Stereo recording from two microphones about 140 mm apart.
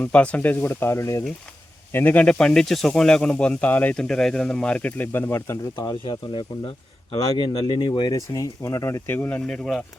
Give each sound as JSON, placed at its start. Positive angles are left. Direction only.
{"t": 0.0, "sound": "speech", "side_deg": 10}
{"t": 5.7, "sound": "speech", "side_deg": 30}